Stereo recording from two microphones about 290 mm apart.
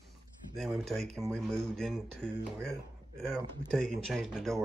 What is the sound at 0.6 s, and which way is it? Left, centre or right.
Speech, centre.